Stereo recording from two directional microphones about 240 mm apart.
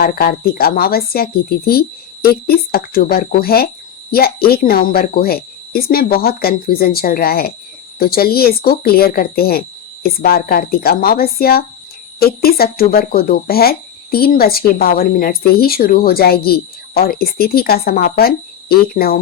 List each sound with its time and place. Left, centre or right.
0.0 s speech: left